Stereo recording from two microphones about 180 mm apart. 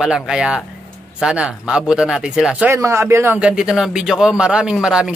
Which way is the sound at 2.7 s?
15° right (ahead or behind).